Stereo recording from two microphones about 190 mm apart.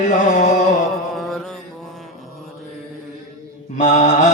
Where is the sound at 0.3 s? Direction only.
40° left (ahead or behind).